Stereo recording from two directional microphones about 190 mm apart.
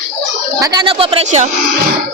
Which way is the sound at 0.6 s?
20° right (ahead or behind).